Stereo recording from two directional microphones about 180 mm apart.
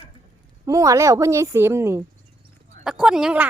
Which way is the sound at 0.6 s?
20° right (ahead or behind).